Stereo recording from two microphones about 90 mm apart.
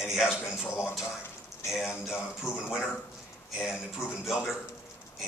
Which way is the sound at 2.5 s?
10° left (ahead or behind).